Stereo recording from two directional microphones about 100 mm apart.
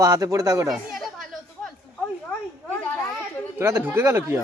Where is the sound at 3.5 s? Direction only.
25° right (ahead or behind).